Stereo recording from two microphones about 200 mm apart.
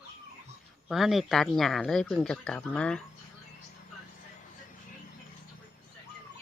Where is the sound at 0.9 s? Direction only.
Centre (ahead or behind).